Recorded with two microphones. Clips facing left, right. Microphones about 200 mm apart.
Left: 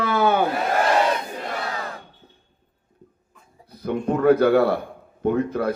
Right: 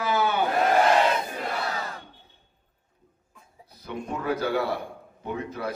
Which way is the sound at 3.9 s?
60° left (ahead or behind).